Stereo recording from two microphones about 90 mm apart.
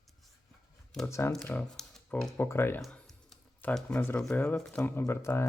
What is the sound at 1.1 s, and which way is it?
Speech, 30° left (ahead or behind).